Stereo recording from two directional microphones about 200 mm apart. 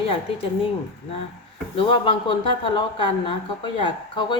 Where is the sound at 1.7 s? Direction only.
25° left (ahead or behind).